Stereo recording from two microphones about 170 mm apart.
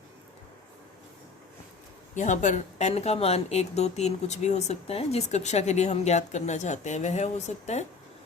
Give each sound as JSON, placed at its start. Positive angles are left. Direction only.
{"t": 2.1, "sound": "speech", "side_deg": 45}